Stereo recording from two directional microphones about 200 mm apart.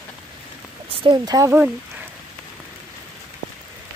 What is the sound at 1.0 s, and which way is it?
Speech, 20° right (ahead or behind).